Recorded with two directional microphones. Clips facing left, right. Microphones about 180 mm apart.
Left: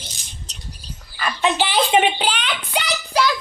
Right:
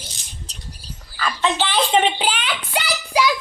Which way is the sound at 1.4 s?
10° left (ahead or behind).